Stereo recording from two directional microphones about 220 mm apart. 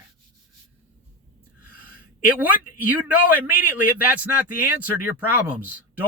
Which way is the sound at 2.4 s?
5° right (ahead or behind).